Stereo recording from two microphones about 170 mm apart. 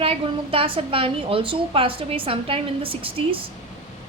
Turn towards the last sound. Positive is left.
turn(degrees=-30)  # may be behind; listen again after turning